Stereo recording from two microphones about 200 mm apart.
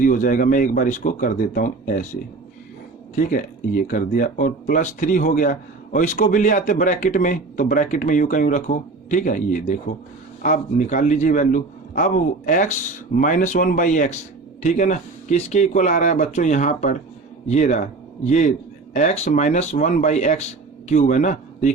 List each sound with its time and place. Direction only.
0.0 s speech: 40° left (ahead or behind)
3.2 s a man's voice: 40° left (ahead or behind)